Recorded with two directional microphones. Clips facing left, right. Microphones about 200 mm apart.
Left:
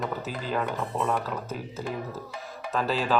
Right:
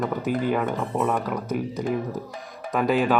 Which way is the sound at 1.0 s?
10° right (ahead or behind).